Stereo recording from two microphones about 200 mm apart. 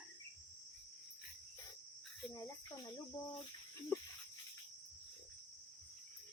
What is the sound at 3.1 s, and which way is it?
Cricket, 20° left (ahead or behind).